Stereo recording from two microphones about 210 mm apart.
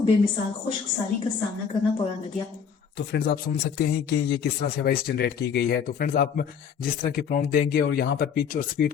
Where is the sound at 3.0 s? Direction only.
50° left (ahead or behind).